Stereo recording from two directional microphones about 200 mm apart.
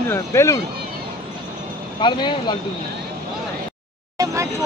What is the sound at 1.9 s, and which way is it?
Speech, 25° left (ahead or behind).